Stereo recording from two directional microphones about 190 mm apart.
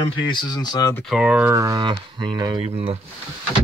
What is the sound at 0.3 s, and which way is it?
Speech, 25° left (ahead or behind).